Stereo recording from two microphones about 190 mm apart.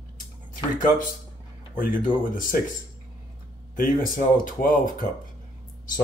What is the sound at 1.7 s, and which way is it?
Speech, 45° left (ahead or behind).